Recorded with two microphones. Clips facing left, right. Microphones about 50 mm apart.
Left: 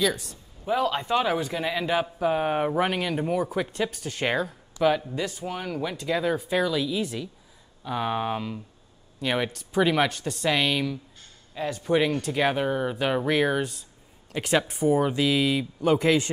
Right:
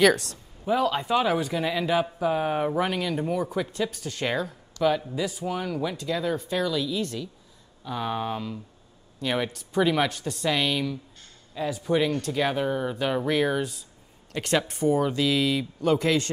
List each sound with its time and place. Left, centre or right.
0.0 s speech: right
0.7 s speech: centre
5.0 s speech: centre
5.4 s speech: centre